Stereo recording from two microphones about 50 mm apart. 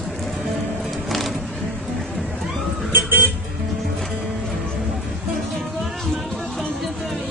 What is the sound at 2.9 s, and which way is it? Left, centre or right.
Music, right.